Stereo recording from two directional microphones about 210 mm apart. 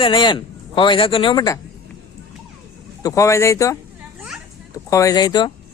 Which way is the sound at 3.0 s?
15° left (ahead or behind).